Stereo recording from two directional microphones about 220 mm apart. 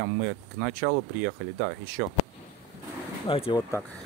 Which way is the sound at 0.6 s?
45° right (ahead or behind).